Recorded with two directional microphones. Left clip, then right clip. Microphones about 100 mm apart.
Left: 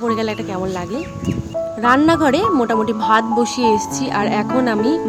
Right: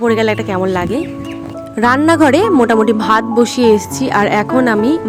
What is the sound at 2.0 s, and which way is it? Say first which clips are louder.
Speech: right 5 dB; 70° right (ahead or behind).